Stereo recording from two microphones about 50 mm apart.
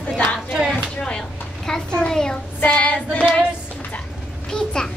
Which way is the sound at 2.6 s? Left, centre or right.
Left.